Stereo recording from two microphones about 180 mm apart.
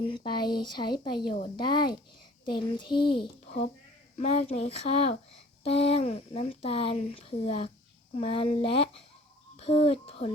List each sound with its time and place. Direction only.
0.0 s speech: 30° left (ahead or behind)